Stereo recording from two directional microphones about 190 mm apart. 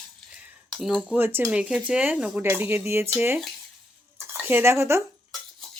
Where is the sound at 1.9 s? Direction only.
5° right (ahead or behind).